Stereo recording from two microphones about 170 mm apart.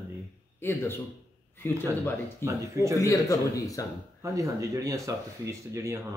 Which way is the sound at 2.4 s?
15° right (ahead or behind).